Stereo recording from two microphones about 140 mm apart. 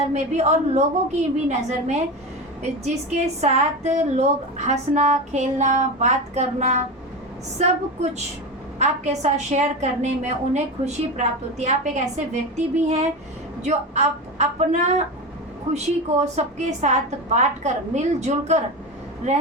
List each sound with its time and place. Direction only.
0.0 s a woman's voice: 50° right (ahead or behind)
8.8 s a woman's voice: 55° right (ahead or behind)